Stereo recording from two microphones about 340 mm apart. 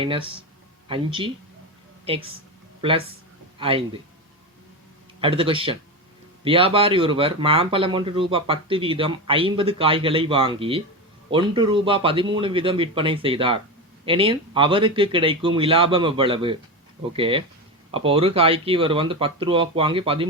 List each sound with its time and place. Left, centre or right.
0.0 s speech: centre
3.6 s speech: centre
5.2 s speech: centre